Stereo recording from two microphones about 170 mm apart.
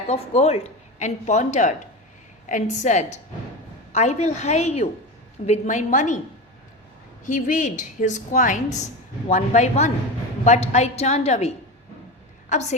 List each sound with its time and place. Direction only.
0.1 s a woman's voice: 35° left (ahead or behind)
7.3 s a woman's voice: 50° left (ahead or behind)